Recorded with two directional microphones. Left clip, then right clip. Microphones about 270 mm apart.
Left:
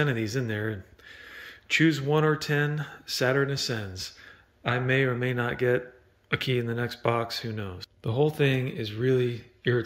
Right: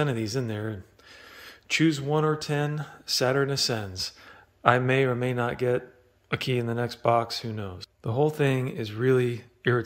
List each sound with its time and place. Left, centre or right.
0.0 s speech: centre